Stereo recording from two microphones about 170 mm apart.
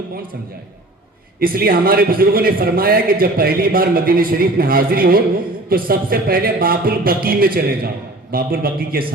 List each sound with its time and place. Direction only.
1.4 s a man's voice: 60° right (ahead or behind)